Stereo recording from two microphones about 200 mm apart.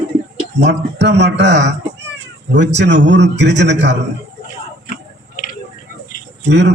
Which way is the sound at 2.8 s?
60° right (ahead or behind).